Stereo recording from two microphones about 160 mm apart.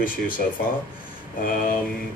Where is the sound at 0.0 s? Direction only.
60° left (ahead or behind).